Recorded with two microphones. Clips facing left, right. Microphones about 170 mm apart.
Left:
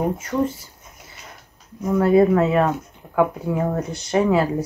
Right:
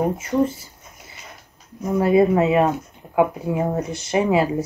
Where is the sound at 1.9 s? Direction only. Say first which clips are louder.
Left 1 dB; 10° right (ahead or behind).